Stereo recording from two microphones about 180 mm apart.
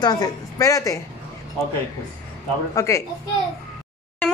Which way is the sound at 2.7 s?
15° left (ahead or behind).